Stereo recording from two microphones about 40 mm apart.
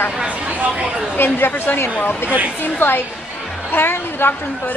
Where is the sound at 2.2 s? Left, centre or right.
Right.